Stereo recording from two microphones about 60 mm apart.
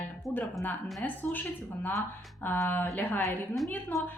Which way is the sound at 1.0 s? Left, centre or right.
Left.